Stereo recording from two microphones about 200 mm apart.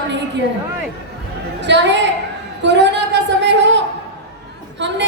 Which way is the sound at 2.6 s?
60° right (ahead or behind).